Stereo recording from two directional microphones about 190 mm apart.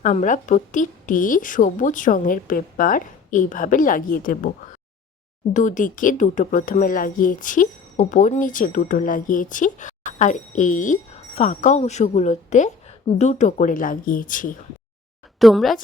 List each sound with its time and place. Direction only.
0.0 s a woman's voice: 40° left (ahead or behind)
5.5 s a woman's voice: 40° left (ahead or behind)
15.4 s a woman's voice: centre (ahead or behind)